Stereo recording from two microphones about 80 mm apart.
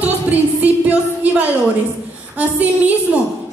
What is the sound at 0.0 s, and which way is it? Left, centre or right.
Music, centre.